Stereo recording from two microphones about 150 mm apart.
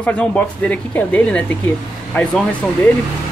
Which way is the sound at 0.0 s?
10° left (ahead or behind).